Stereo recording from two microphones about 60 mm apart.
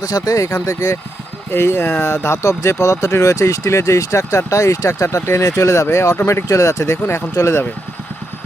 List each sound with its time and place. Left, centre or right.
0.0 s speech: left
1.5 s speech: left